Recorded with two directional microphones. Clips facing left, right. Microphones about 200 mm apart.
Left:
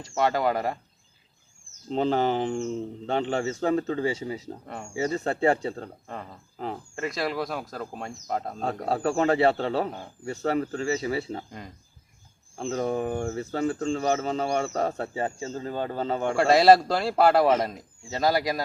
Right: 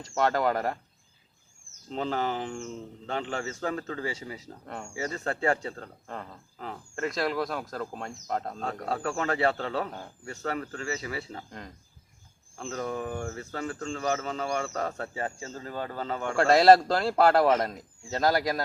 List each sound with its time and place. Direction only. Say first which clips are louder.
0.2 s speech: left 1 dB; 5° left (ahead or behind)
1.9 s speech: left 6 dB; 25° left (ahead or behind)
6.9 s speech: right 1 dB; 5° left (ahead or behind)
8.6 s speech: left 5 dB; 30° left (ahead or behind)
12.6 s speech: left 6 dB; 35° left (ahead or behind)
16.3 s a man's voice: left 1 dB; 5° left (ahead or behind)